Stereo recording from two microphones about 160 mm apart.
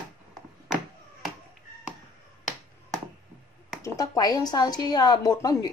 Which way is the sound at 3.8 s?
25° left (ahead or behind).